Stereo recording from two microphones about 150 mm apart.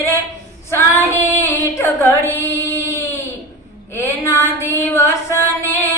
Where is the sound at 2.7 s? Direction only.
15° left (ahead or behind).